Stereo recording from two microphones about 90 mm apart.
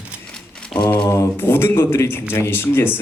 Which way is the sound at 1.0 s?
30° left (ahead or behind).